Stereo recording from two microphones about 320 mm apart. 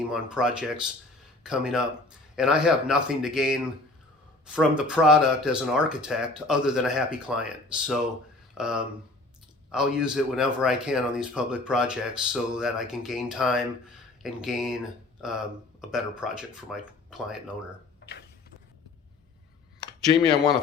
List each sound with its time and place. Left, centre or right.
0.1 s speech: centre
4.8 s speech: centre
18.0 s a sound: left
20.1 s speech: centre